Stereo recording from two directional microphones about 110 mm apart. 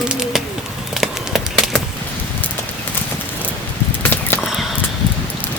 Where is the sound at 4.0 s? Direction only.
15° left (ahead or behind).